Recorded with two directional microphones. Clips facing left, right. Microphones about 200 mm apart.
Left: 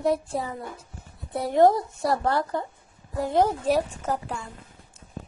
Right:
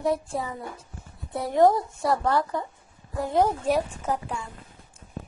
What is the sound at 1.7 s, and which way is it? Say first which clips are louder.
Speech: even; 35° left (ahead or behind).